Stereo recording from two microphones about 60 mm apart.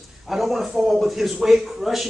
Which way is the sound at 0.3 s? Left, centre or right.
Centre.